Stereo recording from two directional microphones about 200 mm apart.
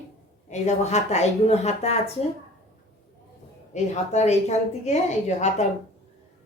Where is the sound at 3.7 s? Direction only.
35° left (ahead or behind).